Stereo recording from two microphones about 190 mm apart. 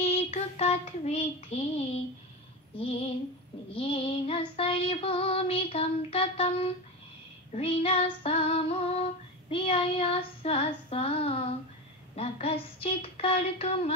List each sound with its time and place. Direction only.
0.0 s child singing: 35° left (ahead or behind)
2.7 s child singing: 30° left (ahead or behind)